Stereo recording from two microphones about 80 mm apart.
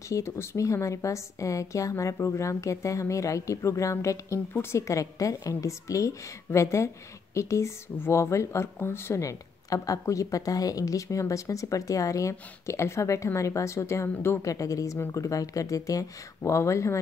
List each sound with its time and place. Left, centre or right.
0.1 s a woman's voice: left
14.5 s a woman's voice: left